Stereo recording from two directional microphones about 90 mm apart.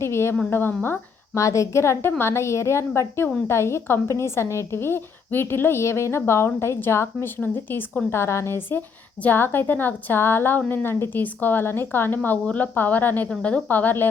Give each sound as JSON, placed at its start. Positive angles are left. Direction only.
{"t": 0.0, "sound": "a woman's voice", "side_deg": 30}
{"t": 1.4, "sound": "a woman's voice", "side_deg": 35}